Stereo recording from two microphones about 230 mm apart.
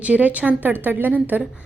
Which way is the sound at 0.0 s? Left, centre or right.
Centre.